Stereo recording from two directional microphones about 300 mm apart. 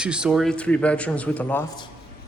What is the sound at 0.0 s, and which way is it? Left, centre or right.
A man's voice, centre.